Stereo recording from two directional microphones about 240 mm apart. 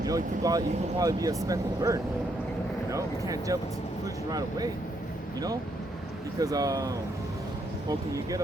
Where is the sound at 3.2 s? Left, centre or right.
Centre.